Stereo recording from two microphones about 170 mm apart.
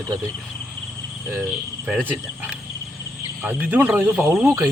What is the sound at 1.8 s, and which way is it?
Speech, 5° right (ahead or behind).